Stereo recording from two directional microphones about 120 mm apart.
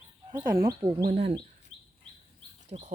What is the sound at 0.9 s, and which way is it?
Speech, 40° right (ahead or behind).